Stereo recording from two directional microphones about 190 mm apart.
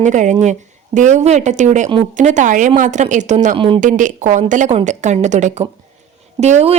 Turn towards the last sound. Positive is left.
turn(degrees=-35)  # may be behind; listen again after turning